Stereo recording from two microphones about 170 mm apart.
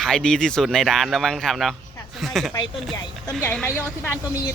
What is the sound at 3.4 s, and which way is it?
A woman's voice, 10° left (ahead or behind).